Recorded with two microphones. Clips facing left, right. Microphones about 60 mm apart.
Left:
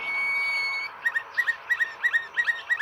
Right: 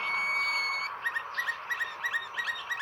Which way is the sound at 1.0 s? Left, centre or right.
Left.